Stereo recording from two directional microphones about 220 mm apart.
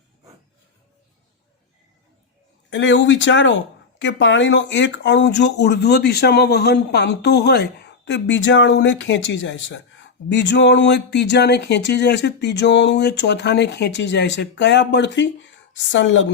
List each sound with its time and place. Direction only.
2.6 s speech: 55° left (ahead or behind)